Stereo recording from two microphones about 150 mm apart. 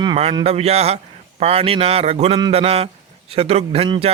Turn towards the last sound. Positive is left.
turn(degrees=-35)  # may be behind; listen again after turning